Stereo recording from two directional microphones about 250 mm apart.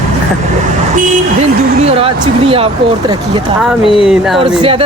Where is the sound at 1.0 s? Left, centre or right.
Right.